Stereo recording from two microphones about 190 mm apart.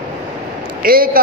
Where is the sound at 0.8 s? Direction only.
50° right (ahead or behind).